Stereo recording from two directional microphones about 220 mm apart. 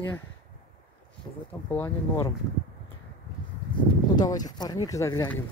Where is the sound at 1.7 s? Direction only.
10° left (ahead or behind).